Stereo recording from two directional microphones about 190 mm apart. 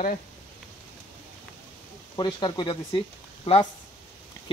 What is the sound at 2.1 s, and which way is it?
Speech, 20° left (ahead or behind).